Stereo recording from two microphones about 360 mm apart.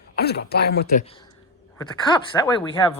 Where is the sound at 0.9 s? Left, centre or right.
Centre.